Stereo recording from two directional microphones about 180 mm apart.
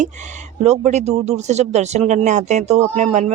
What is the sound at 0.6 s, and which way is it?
Speech, 35° right (ahead or behind).